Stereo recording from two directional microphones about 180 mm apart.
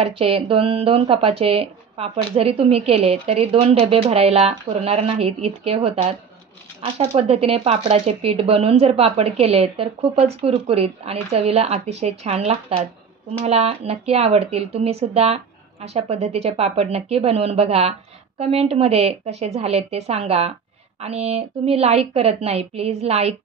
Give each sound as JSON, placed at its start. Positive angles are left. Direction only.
{"t": 0.0, "sound": "speech", "side_deg": -30}